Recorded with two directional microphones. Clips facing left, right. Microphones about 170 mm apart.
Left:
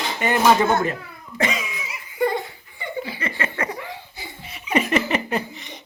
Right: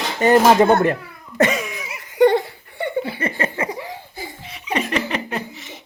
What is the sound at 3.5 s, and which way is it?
Laughter, 25° right (ahead or behind).